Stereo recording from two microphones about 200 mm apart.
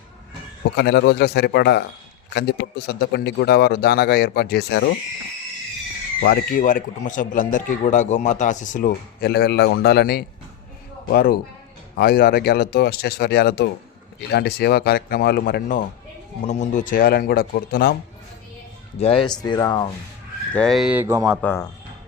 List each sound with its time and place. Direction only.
0.8 s speech: 60° left (ahead or behind)
6.2 s speech: 50° left (ahead or behind)
16.5 s speech: 35° left (ahead or behind)
18.9 s speech: 30° left (ahead or behind)
19.4 s speech: 20° left (ahead or behind)
20.5 s speech: 5° left (ahead or behind); by 21.3 s 10° right (ahead or behind)
21.4 s speech: 10° left (ahead or behind)